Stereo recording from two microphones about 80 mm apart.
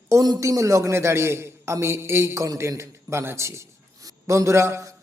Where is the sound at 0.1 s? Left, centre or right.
Right.